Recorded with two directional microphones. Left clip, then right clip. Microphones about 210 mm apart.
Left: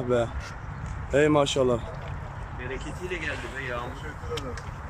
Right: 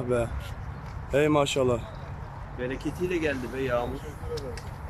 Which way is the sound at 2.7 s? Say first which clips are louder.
Right 4 dB; 60° right (ahead or behind).